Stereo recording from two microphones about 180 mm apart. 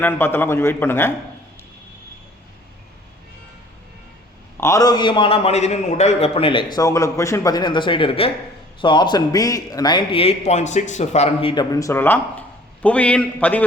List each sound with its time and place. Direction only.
0.0 s a man's voice: 10° left (ahead or behind)
4.5 s speech: 15° left (ahead or behind)